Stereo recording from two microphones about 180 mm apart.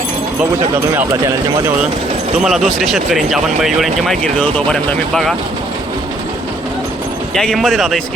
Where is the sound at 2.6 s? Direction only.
Centre (ahead or behind).